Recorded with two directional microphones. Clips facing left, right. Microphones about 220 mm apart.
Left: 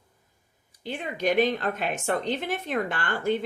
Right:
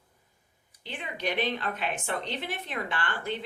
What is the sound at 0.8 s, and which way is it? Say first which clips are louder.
A woman's voice: left 6 dB; 45° left (ahead or behind).